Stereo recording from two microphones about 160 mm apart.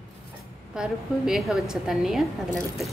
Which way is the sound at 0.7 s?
5° right (ahead or behind).